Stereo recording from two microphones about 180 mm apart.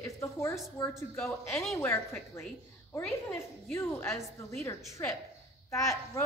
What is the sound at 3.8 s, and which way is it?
Speech, 15° left (ahead or behind).